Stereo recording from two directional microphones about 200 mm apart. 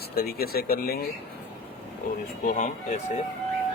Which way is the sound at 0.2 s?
50° left (ahead or behind).